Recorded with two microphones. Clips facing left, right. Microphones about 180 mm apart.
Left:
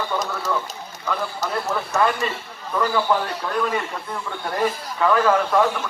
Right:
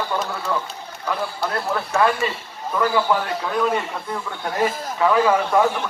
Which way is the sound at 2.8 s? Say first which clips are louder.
Right 1 dB; 5° right (ahead or behind).